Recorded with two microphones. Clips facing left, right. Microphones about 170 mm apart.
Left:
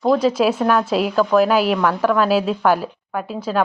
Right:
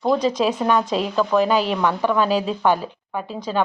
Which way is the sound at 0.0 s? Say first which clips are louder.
Left 3 dB; 5° left (ahead or behind).